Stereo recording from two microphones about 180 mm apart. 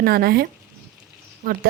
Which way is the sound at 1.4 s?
50° right (ahead or behind).